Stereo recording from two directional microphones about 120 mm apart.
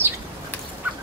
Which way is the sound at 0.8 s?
15° right (ahead or behind).